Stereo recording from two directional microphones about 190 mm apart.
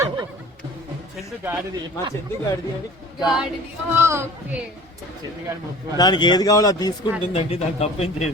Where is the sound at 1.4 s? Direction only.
10° right (ahead or behind).